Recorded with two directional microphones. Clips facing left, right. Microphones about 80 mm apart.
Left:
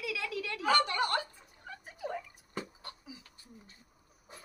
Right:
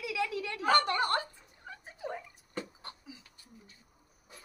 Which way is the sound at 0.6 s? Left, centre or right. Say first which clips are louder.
Right 2 dB; right.